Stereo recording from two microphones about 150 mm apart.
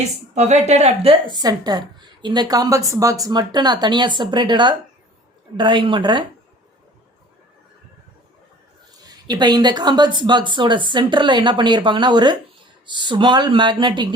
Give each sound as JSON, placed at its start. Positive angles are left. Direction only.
{"t": 0.3, "sound": "a woman's voice", "side_deg": -50}
{"t": 1.3, "sound": "a woman's voice", "side_deg": -25}
{"t": 9.0, "sound": "speech", "side_deg": -30}